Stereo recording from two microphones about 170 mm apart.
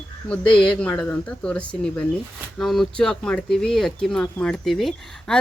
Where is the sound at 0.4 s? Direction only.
30° left (ahead or behind).